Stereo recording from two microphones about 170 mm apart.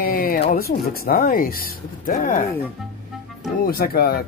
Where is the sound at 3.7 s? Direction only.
60° left (ahead or behind).